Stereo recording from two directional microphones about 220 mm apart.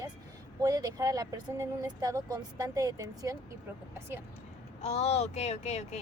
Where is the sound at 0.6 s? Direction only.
15° right (ahead or behind).